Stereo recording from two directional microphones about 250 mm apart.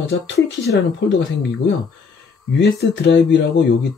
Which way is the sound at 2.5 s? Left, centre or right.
Left.